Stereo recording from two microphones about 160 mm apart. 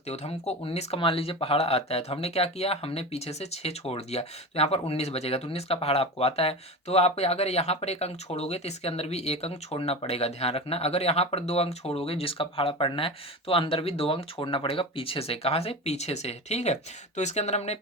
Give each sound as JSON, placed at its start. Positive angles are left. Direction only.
{"t": 0.1, "sound": "speech", "side_deg": 40}